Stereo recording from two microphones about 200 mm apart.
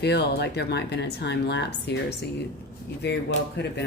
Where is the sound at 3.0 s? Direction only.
60° left (ahead or behind).